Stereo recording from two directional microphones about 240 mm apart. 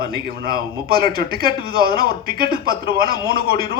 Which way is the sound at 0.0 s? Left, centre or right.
Right.